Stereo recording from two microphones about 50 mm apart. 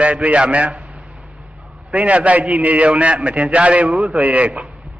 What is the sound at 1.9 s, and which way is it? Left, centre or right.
A man's voice, right.